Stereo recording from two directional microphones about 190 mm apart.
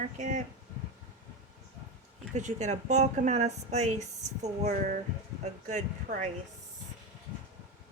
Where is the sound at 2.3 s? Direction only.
40° right (ahead or behind).